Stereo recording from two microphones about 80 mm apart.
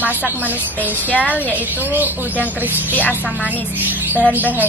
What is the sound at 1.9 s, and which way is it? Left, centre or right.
Speech, right.